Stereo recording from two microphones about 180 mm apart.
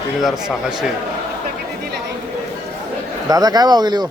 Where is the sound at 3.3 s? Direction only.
20° right (ahead or behind).